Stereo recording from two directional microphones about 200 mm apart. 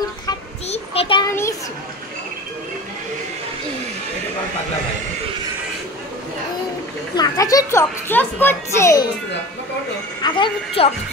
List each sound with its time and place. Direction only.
0.7 s child singing: 30° left (ahead or behind)
7.2 s a child's voice: 15° left (ahead or behind)
10.2 s a woman's voice: 25° left (ahead or behind)